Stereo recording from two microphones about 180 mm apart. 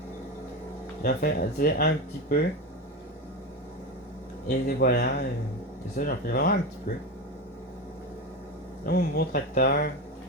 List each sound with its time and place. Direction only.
1.0 s speech: 55° left (ahead or behind)
4.4 s speech: 55° left (ahead or behind)
8.9 s speech: 60° left (ahead or behind)